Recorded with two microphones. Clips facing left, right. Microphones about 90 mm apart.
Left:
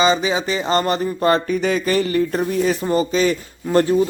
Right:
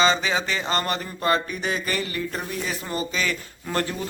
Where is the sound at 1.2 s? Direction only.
35° left (ahead or behind).